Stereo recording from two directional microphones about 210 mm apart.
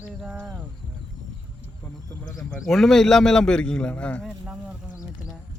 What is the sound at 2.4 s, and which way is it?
A man's voice, centre (ahead or behind).